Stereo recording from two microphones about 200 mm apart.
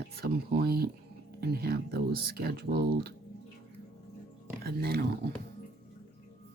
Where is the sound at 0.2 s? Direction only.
50° right (ahead or behind).